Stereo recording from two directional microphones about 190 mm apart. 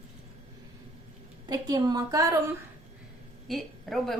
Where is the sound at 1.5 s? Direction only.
20° right (ahead or behind).